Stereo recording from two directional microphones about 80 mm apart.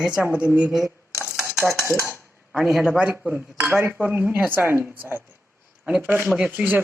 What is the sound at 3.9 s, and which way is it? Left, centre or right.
Speech, right.